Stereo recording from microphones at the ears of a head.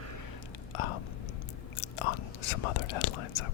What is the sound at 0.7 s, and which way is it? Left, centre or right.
Whispering, left.